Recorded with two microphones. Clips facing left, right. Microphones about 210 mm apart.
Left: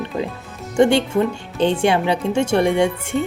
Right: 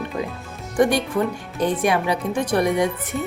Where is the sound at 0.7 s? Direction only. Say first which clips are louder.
Left 4 dB; 25° left (ahead or behind).